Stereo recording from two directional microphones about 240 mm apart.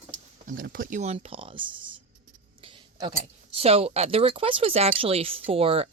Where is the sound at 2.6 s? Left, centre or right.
Right.